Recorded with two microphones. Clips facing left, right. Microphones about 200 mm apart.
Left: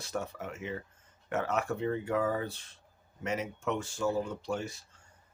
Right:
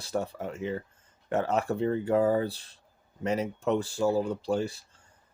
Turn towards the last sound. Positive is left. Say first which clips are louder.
# right 7 dB
turn(degrees=-35)  # may be behind; listen again after turning